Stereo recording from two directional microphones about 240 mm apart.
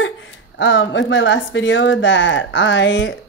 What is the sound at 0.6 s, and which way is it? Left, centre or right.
Speech, left.